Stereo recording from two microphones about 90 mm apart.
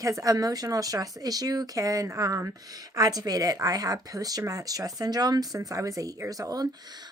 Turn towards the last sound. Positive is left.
turn(degrees=-50)  # may be behind; listen again after turning